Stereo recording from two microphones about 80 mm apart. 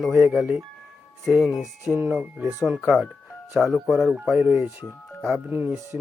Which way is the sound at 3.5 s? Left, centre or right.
Centre.